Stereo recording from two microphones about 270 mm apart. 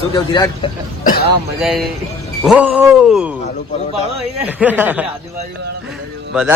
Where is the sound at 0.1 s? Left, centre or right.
Centre.